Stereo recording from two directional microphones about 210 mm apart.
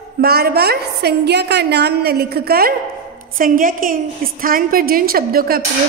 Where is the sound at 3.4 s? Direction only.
40° right (ahead or behind).